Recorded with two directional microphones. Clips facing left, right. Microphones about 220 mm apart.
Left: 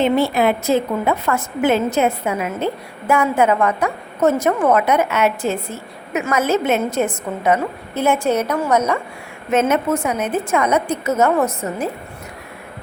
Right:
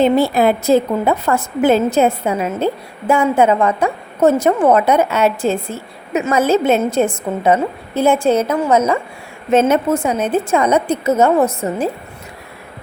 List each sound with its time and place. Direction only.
0.0 s a woman's voice: 35° right (ahead or behind)